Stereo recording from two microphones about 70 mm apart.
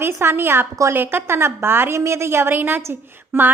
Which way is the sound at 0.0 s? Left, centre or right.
Right.